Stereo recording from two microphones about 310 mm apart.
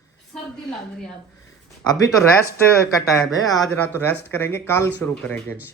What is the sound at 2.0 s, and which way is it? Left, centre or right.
Speech, centre.